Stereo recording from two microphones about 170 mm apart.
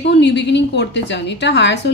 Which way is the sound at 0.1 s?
90° left.